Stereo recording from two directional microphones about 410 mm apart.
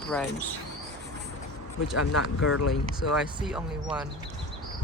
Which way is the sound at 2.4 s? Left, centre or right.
Left.